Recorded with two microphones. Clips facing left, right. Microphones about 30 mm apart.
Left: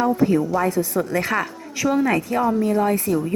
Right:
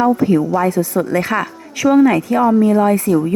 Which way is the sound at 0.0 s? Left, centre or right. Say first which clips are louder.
Right 5 dB; right.